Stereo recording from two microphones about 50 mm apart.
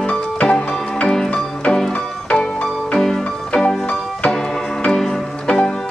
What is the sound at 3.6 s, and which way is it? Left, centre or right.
Music, left.